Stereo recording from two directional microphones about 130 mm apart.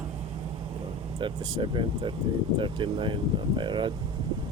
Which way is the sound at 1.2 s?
40° right (ahead or behind).